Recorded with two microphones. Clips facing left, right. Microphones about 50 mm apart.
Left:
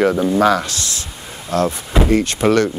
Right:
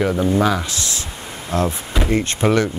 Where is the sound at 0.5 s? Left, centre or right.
Right.